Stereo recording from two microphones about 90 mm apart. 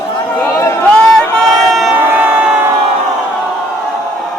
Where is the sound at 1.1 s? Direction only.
Centre (ahead or behind).